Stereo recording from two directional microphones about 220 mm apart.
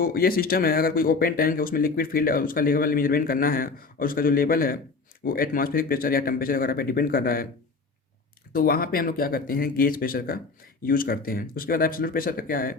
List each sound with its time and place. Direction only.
0.0 s speech: 40° left (ahead or behind)
8.5 s speech: 40° left (ahead or behind)